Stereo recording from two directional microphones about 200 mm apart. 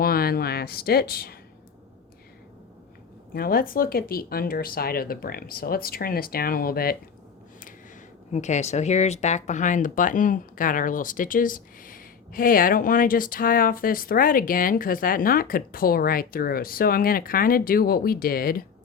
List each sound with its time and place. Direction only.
0.0 s a sound: 50° left (ahead or behind)
3.3 s speech: 50° left (ahead or behind)
8.3 s speech: 35° left (ahead or behind)